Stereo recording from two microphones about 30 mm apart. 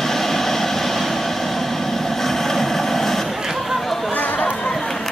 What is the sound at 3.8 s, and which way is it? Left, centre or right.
Chatter, centre.